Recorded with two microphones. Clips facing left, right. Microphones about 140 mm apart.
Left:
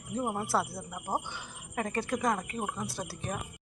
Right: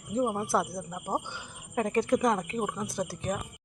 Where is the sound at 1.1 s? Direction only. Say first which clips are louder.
Right 1 dB; 10° left (ahead or behind).